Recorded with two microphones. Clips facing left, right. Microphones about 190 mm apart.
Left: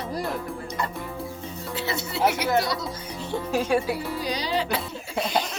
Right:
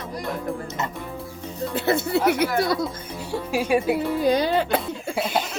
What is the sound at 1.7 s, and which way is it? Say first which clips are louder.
Speech: right 8 dB; 50° right (ahead or behind).